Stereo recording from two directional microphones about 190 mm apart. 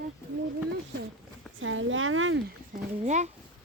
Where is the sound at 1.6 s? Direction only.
90° right.